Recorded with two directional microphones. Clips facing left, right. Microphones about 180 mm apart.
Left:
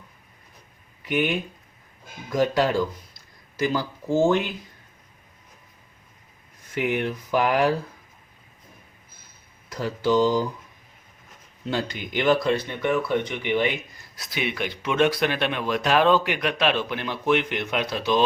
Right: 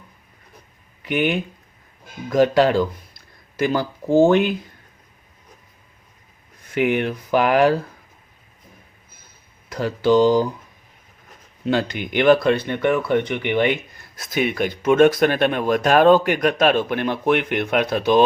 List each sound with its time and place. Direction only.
2.3 s speech: 70° right (ahead or behind)
6.7 s speech: 70° right (ahead or behind)
9.6 s speech: 65° right (ahead or behind)
11.6 s speech: 70° right (ahead or behind)
14.2 s speech: 45° right (ahead or behind)